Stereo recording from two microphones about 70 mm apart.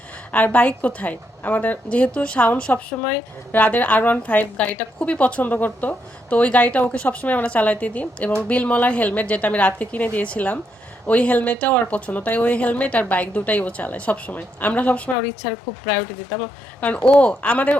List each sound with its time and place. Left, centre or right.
0.3 s a woman's voice: left
16.8 s a woman's voice: left